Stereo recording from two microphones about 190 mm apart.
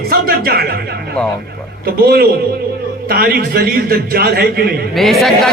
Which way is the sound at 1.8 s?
55° right (ahead or behind).